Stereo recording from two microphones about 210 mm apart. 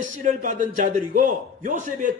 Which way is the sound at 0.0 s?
40° right (ahead or behind).